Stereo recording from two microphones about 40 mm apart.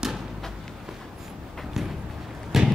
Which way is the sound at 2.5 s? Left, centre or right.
Centre.